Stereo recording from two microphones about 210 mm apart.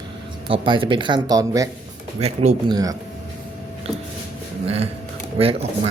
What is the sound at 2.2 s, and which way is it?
Speech, 30° right (ahead or behind).